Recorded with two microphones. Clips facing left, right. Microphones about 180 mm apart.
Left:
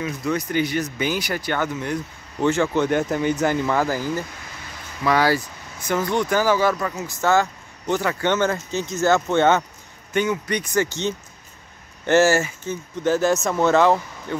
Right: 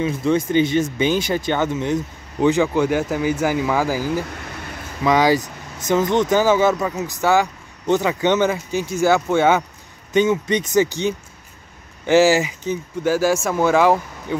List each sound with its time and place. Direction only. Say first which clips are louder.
0.0 s speech: right 6 dB; 25° right (ahead or behind); by 9.7 s 10° right (ahead or behind)
10.1 s speech: right 5 dB; 20° right (ahead or behind)